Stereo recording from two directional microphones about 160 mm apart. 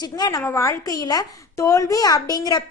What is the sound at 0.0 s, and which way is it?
A woman's voice, 25° left (ahead or behind).